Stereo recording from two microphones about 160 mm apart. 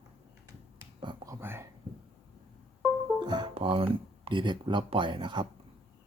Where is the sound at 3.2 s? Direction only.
30° right (ahead or behind).